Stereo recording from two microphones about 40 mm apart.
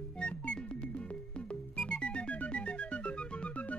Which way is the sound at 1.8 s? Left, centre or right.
Left.